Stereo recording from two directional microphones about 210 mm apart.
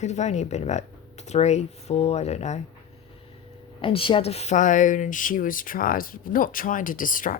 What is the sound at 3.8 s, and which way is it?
Speech, 25° left (ahead or behind).